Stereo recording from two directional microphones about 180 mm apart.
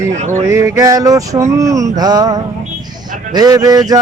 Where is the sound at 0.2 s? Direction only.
40° right (ahead or behind).